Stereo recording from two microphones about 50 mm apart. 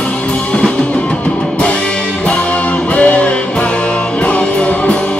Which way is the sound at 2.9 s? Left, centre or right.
Left.